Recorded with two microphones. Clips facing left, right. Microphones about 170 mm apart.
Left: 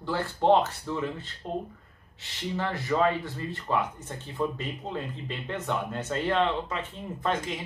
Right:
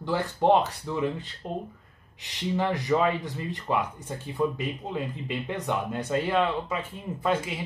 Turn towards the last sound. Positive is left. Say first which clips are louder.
# right 2 dB
turn(degrees=-10)  # may be behind; listen again after turning